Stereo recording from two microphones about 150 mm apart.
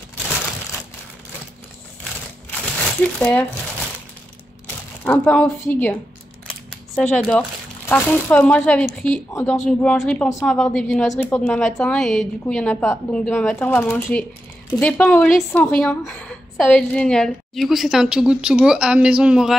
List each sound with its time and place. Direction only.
3.2 s speech: 10° left (ahead or behind)
5.0 s speech: 10° left (ahead or behind)
7.0 s a woman's voice: 5° left (ahead or behind)